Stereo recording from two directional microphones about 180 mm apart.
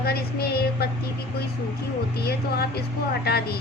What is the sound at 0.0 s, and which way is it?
Speech, 60° left (ahead or behind).